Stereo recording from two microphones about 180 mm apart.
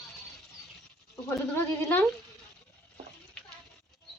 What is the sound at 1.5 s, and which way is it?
Speech, 10° left (ahead or behind).